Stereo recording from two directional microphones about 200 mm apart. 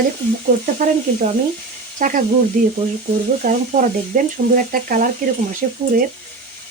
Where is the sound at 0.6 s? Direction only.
40° right (ahead or behind).